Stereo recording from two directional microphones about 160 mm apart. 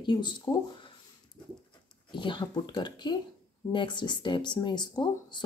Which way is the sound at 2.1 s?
30° left (ahead or behind).